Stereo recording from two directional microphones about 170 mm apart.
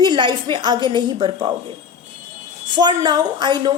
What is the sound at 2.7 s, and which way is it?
A woman's voice, 25° right (ahead or behind).